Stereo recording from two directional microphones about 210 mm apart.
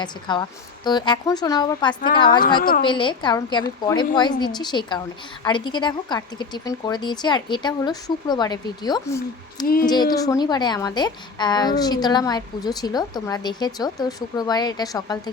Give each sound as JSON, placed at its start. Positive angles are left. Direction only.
{"t": 0.0, "sound": "a woman's voice", "side_deg": 20}
{"t": 2.6, "sound": "speech", "side_deg": 45}
{"t": 2.8, "sound": "a woman's voice", "side_deg": 20}